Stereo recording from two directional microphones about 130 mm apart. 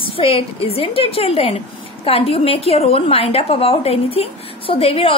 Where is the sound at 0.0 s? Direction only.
45° left (ahead or behind).